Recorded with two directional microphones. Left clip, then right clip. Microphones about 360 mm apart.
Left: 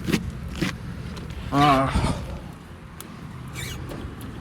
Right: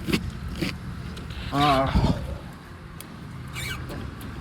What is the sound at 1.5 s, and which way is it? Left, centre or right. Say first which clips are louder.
Speech: left 2 dB; left.